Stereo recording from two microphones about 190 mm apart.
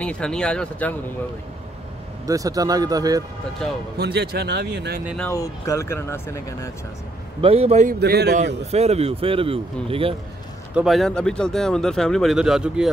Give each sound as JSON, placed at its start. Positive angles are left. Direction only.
{"t": 0.0, "sound": "speech", "side_deg": 5}
{"t": 2.2, "sound": "a man's voice", "side_deg": -20}
{"t": 4.0, "sound": "speech", "side_deg": -60}
{"t": 5.3, "sound": "speech", "side_deg": 15}
{"t": 7.4, "sound": "speech", "side_deg": -30}
{"t": 8.0, "sound": "speech", "side_deg": -60}
{"t": 8.4, "sound": "speech", "side_deg": -35}
{"t": 10.7, "sound": "speech", "side_deg": -5}